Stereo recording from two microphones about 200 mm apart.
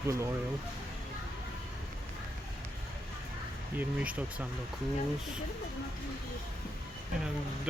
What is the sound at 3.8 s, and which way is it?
Speech, 5° right (ahead or behind).